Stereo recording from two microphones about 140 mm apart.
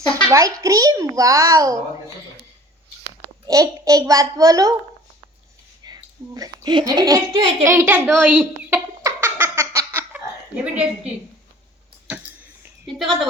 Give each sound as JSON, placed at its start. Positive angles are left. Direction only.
{"t": 0.3, "sound": "a child's voice", "side_deg": -25}
{"t": 3.4, "sound": "a child's voice", "side_deg": -25}
{"t": 5.8, "sound": "a child's voice", "side_deg": -30}
{"t": 9.0, "sound": "giggle", "side_deg": -20}
{"t": 10.6, "sound": "a woman's voice", "side_deg": -10}
{"t": 12.0, "sound": "a sound", "side_deg": -10}
{"t": 13.0, "sound": "a woman's voice", "side_deg": 0}